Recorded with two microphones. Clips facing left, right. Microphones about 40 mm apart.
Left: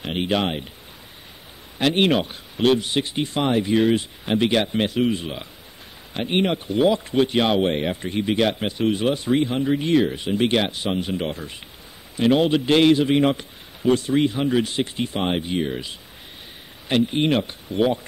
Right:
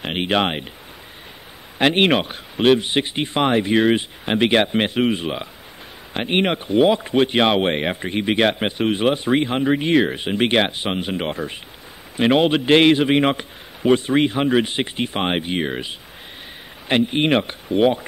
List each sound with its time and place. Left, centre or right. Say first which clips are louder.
0.0 s a man's voice: right 3 dB; right
1.8 s a man's voice: right 3 dB; right